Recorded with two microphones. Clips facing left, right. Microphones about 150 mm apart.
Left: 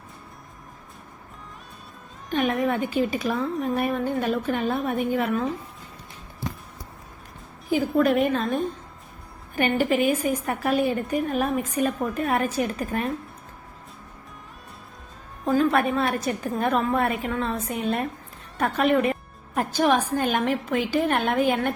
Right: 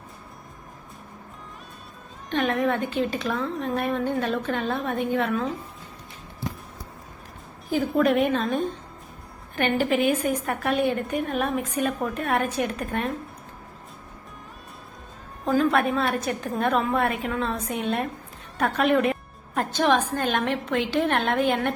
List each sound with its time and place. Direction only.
2.3 s a woman's voice: centre (ahead or behind)
7.8 s a woman's voice: centre (ahead or behind)
15.4 s a woman's voice: centre (ahead or behind)